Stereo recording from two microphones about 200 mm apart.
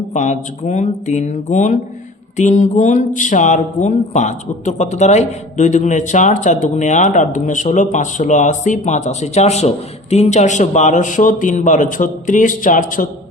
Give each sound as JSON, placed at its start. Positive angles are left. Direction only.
{"t": 0.1, "sound": "speech", "side_deg": 40}